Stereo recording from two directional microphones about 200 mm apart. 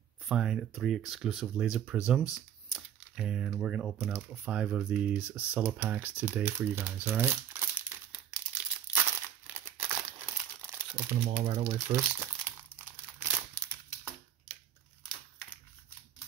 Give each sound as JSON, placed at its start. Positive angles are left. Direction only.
{"t": 0.3, "sound": "speech", "side_deg": 0}
{"t": 9.8, "sound": "crumpling", "side_deg": -10}
{"t": 11.4, "sound": "speech", "side_deg": -25}
{"t": 11.9, "sound": "crumpling", "side_deg": -10}